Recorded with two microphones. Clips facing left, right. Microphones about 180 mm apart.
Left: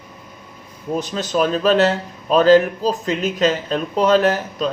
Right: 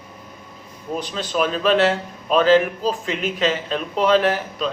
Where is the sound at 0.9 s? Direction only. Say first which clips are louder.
Left 3 dB; 45° left (ahead or behind).